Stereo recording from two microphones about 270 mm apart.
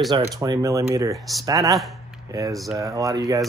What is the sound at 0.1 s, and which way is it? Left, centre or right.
Speech, centre.